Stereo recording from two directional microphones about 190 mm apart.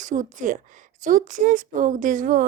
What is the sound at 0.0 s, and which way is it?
Speech, 45° right (ahead or behind).